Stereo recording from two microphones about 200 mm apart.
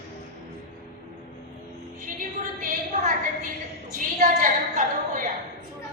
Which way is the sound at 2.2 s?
40° right (ahead or behind).